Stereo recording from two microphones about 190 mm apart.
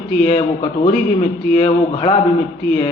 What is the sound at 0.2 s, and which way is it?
A man's voice, 35° left (ahead or behind).